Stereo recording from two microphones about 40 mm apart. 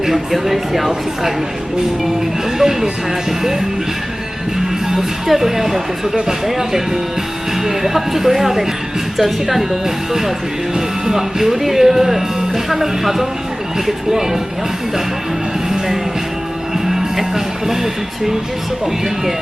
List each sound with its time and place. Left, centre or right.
0.0 s speech: centre
2.6 s speech: centre
4.9 s speech: centre
16.8 s music: centre